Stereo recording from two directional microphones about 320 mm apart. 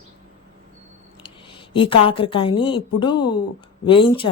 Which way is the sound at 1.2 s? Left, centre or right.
Centre.